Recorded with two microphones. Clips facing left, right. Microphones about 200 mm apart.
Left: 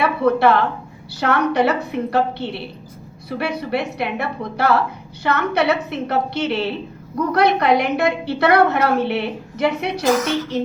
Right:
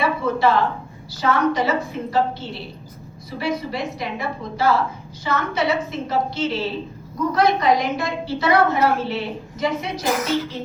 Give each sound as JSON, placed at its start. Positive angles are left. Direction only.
{"t": 0.0, "sound": "a woman's voice", "side_deg": 65}